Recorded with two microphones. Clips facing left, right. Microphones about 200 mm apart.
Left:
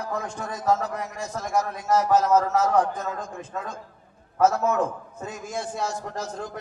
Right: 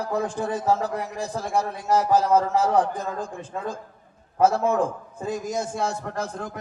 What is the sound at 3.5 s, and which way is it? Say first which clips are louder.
Speech: right 3 dB; 20° right (ahead or behind).